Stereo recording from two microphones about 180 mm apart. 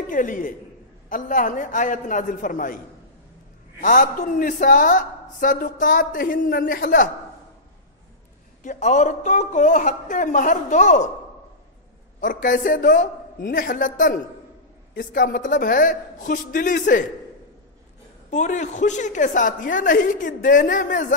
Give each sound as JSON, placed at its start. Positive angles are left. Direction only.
{"t": 0.0, "sound": "a man's voice", "side_deg": 45}
{"t": 3.8, "sound": "a man's voice", "side_deg": 45}
{"t": 8.6, "sound": "a man's voice", "side_deg": 40}
{"t": 12.2, "sound": "a man's voice", "side_deg": 45}
{"t": 18.3, "sound": "a man's voice", "side_deg": 40}